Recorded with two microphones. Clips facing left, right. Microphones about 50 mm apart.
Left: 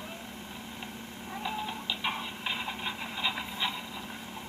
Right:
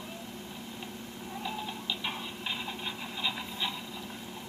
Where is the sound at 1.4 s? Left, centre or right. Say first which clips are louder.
Left 2 dB; centre.